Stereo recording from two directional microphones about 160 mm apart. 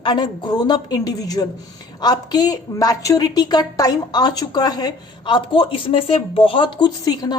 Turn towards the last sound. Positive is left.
turn(degrees=25)  # may be behind; listen again after turning